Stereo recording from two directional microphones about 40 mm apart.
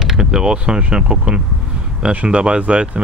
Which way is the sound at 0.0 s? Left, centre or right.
Centre.